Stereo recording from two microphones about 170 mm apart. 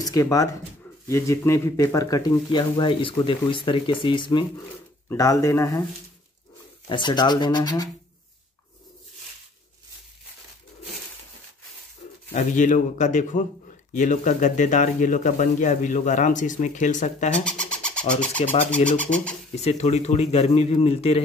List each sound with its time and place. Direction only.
0.0 s speech: 20° left (ahead or behind)
6.9 s speech: 25° left (ahead or behind)
12.3 s a man's voice: 45° left (ahead or behind)
17.5 s bird: 5° left (ahead or behind)
18.9 s speech: 10° left (ahead or behind)
19.5 s speech: 40° left (ahead or behind)